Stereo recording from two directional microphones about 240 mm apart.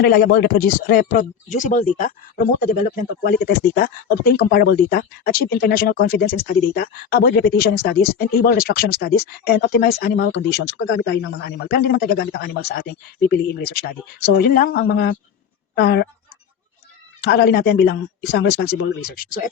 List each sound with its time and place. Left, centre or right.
0.0 s speech: left
17.2 s speech: left